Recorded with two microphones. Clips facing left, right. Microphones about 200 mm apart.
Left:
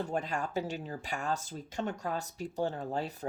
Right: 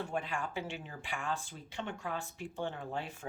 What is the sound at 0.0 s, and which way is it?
Speech, 40° left (ahead or behind).